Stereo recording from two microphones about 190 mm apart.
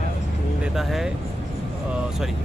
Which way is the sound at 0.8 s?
Centre (ahead or behind).